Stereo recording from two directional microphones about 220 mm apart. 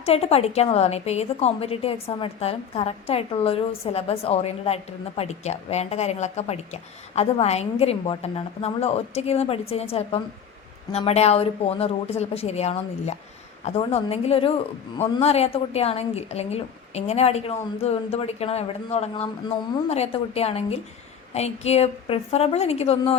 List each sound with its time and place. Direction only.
0.0 s a woman's voice: 30° left (ahead or behind)